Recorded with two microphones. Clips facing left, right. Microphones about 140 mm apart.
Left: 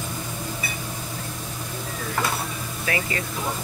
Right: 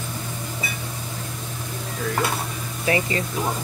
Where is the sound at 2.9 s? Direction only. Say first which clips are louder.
Right 5 dB; 30° right (ahead or behind).